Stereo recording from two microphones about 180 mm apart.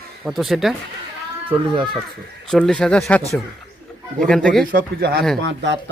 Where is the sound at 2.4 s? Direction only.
5° left (ahead or behind).